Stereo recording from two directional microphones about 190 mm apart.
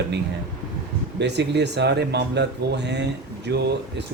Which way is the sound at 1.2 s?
65° right (ahead or behind).